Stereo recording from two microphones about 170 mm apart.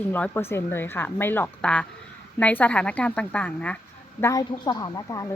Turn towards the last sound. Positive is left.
turn(degrees=20)  # may be behind; listen again after turning